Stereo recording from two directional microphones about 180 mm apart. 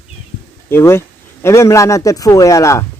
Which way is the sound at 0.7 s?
15° left (ahead or behind).